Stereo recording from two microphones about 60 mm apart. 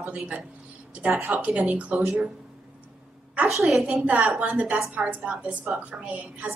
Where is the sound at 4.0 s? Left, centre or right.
Right.